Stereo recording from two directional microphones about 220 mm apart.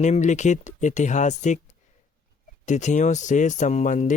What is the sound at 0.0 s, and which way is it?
Speech, 35° left (ahead or behind).